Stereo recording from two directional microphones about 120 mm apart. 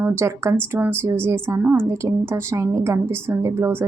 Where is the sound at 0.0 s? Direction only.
20° right (ahead or behind).